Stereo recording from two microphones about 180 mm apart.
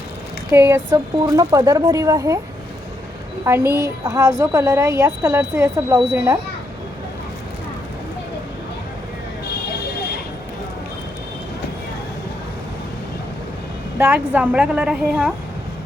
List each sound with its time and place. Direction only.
0.5 s a woman's voice: 15° right (ahead or behind)
3.4 s a woman's voice: 15° right (ahead or behind)
14.0 s a woman's voice: 10° right (ahead or behind)